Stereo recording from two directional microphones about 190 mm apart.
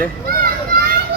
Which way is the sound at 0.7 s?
50° right (ahead or behind).